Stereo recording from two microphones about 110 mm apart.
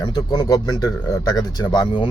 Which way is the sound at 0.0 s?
40° left (ahead or behind).